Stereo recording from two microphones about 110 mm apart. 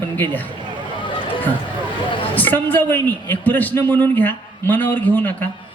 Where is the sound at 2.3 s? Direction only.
15° left (ahead or behind).